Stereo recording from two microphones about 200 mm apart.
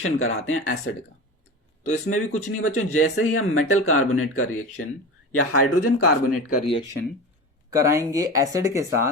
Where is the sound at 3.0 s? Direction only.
90° left.